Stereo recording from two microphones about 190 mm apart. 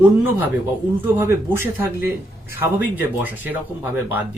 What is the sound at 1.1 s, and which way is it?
Speech, 10° right (ahead or behind).